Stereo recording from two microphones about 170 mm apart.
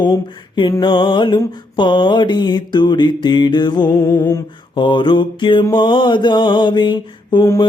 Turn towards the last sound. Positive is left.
turn(degrees=20)  # may be behind; listen again after turning